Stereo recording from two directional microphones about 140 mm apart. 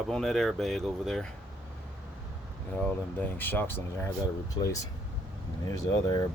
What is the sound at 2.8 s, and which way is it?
Speech, 15° left (ahead or behind).